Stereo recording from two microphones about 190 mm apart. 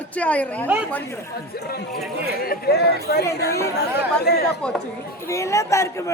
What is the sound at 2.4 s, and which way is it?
Speech, 55° left (ahead or behind).